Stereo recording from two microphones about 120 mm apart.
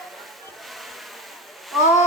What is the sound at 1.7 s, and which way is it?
Speech, centre (ahead or behind).